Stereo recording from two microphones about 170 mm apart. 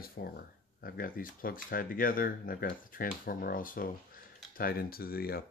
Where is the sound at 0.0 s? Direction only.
60° left (ahead or behind).